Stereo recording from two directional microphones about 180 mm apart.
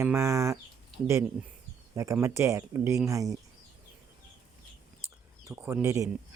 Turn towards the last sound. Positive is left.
turn(degrees=-20)  # may be behind; listen again after turning